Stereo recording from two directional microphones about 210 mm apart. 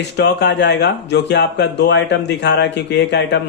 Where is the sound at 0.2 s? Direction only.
55° left (ahead or behind).